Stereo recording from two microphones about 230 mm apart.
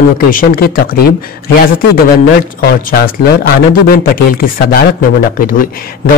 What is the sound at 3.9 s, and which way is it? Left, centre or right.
Speech, left.